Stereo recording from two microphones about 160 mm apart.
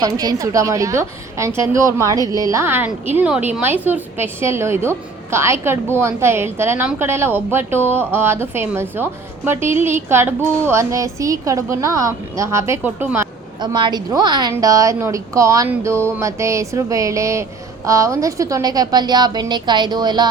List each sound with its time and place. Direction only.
0.0 s a woman's voice: 25° right (ahead or behind)
13.6 s speech: 30° right (ahead or behind)